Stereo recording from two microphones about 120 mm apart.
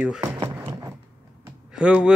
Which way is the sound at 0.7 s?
30° right (ahead or behind).